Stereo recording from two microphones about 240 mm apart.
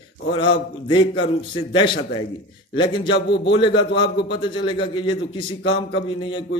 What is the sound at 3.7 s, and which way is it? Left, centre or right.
Speech, left.